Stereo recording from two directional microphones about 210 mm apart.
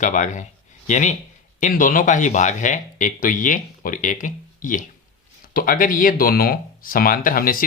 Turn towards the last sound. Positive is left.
turn(degrees=45)  # may be behind; listen again after turning